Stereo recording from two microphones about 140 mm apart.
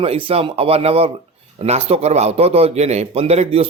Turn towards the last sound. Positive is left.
turn(degrees=-45)  # may be behind; listen again after turning